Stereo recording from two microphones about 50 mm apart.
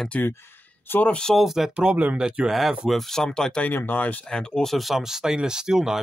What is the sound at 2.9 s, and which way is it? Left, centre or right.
Speech, centre.